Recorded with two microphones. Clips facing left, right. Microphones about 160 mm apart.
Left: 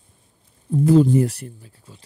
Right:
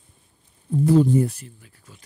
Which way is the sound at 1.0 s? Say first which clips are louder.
Left 2 dB; 90° left.